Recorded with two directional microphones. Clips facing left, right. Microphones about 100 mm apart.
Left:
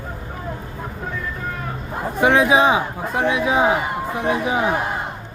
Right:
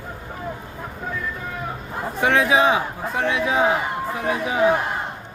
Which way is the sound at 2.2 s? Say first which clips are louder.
Left 3 dB; 15° left (ahead or behind).